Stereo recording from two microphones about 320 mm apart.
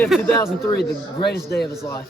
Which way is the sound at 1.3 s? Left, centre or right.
Left.